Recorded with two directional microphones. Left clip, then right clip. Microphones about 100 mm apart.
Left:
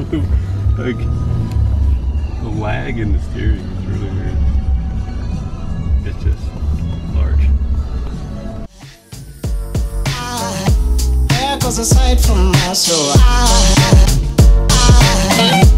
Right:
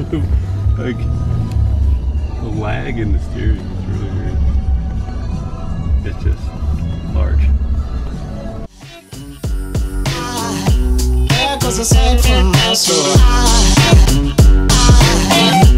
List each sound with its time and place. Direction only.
0.7 s speech: 20° left (ahead or behind)
6.7 s music: 20° right (ahead or behind)
9.4 s music: centre (ahead or behind)